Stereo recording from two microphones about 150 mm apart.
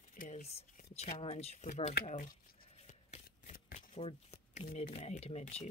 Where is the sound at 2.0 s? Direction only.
55° left (ahead or behind).